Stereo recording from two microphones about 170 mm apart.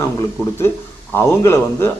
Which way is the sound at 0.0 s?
15° left (ahead or behind).